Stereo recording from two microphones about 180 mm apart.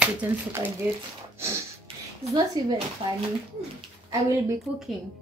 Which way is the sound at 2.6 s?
20° right (ahead or behind).